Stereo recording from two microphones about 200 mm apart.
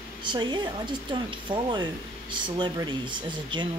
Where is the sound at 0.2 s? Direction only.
25° right (ahead or behind).